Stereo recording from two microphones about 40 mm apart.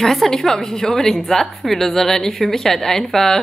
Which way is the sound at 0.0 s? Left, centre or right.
Centre.